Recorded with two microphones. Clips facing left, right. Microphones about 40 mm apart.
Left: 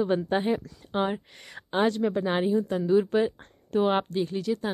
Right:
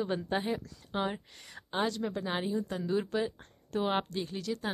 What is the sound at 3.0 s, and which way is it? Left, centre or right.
Speech, left.